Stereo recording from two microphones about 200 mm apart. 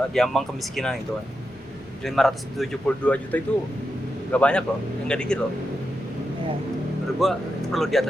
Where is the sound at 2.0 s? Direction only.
Centre (ahead or behind).